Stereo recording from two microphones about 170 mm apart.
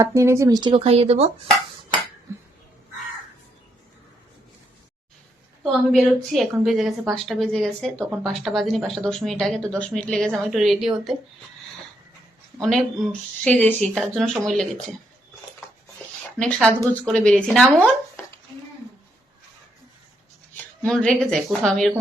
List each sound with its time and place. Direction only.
0.0 s speech: 15° right (ahead or behind); by 1.3 s 35° right (ahead or behind)
2.3 s a sound: 15° right (ahead or behind)
5.9 s a woman's voice: centre (ahead or behind)
12.5 s a woman's voice: 5° left (ahead or behind)
16.4 s a woman's voice: 5° left (ahead or behind)
20.8 s a woman's voice: 5° left (ahead or behind)